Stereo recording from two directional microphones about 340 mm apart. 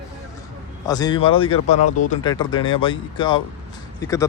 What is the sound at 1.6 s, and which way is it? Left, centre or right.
Speech, left.